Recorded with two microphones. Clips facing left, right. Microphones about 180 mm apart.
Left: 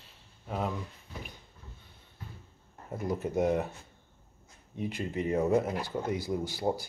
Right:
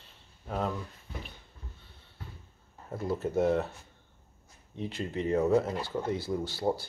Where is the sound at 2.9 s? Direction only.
15° left (ahead or behind).